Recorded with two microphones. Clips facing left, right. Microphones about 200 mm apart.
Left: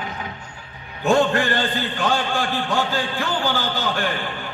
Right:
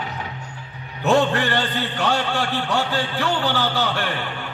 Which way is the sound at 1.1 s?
70° right (ahead or behind).